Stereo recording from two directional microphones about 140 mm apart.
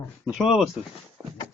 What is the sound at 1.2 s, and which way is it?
Clip-clop, 30° right (ahead or behind).